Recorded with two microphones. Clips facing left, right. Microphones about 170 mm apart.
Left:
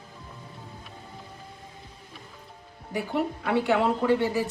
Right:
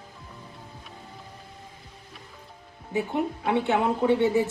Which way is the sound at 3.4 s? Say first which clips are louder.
Even; 20° right (ahead or behind).